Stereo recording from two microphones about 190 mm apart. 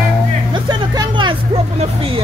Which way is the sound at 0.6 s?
25° right (ahead or behind).